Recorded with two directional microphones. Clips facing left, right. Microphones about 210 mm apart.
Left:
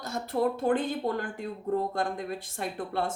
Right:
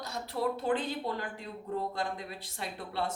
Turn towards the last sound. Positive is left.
turn(degrees=50)  # may be behind; listen again after turning